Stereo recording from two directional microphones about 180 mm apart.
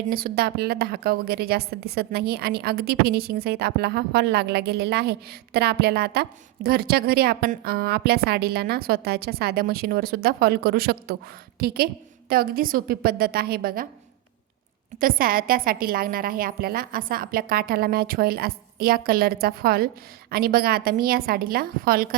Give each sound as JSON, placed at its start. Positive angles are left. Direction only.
{"t": 0.1, "sound": "a woman's voice", "side_deg": -55}
{"t": 15.0, "sound": "a woman's voice", "side_deg": -55}